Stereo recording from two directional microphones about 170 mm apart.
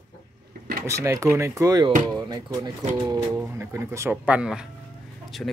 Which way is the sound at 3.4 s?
15° right (ahead or behind).